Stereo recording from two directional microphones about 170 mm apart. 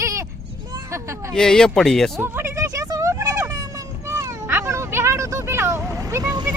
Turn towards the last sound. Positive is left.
turn(degrees=-15)  # may be behind; listen again after turning